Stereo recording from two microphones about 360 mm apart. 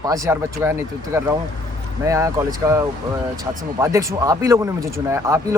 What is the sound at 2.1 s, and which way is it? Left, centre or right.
Speech, centre.